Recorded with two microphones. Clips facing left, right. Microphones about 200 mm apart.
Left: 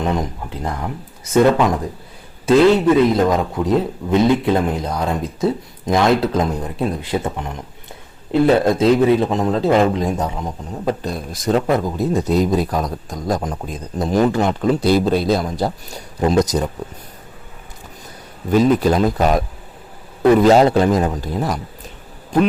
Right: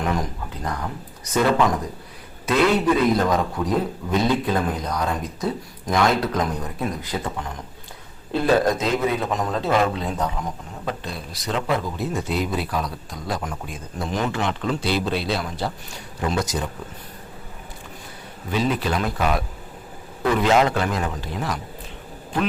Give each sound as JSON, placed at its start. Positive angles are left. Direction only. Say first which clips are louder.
{"t": 0.0, "sound": "a man's voice", "louder": "left 4 dB", "side_deg": 25}
{"t": 10.8, "sound": "a man's voice", "louder": "left 8 dB", "side_deg": 45}
{"t": 18.5, "sound": "a man's voice", "louder": "left 9 dB", "side_deg": 45}